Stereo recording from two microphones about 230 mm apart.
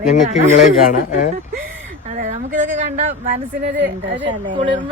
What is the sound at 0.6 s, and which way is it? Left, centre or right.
Speech, left.